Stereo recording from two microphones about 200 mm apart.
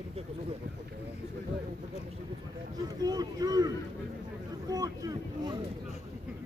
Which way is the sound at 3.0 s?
20° right (ahead or behind).